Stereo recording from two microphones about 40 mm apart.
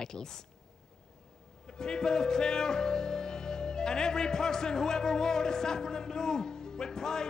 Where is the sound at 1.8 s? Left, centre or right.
Centre.